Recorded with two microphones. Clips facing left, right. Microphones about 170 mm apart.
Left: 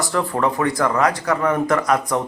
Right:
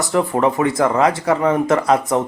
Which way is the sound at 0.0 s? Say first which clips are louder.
Right 4 dB; 20° right (ahead or behind).